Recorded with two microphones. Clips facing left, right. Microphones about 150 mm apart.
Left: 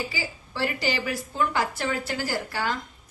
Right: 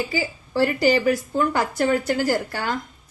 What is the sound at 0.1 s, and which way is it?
A woman's voice, 45° right (ahead or behind).